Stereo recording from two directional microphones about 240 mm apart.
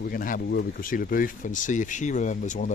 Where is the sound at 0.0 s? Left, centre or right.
Left.